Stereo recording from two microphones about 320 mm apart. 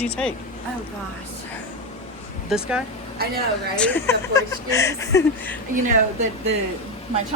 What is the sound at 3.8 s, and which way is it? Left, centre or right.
Speech, centre.